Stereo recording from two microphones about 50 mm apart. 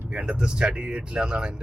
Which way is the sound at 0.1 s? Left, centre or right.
Right.